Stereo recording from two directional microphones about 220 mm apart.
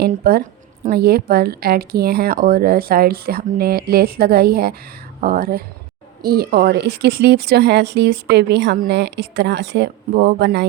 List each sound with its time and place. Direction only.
0.0 s speech: 45° right (ahead or behind)